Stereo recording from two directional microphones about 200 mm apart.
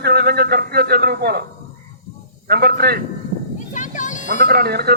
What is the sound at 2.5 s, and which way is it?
Speech, 50° right (ahead or behind).